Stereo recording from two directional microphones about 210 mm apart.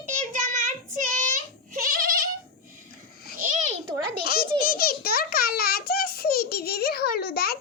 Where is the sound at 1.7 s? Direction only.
40° right (ahead or behind).